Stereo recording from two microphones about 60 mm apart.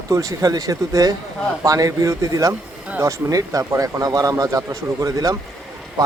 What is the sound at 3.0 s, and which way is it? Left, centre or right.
A man's voice, right.